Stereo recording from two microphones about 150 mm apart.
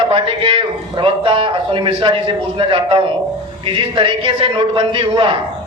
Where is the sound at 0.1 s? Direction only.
35° right (ahead or behind).